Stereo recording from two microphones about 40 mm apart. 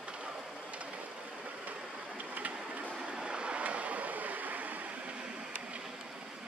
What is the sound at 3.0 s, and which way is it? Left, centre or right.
Waves, right.